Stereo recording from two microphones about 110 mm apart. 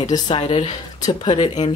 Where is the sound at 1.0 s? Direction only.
45° left (ahead or behind).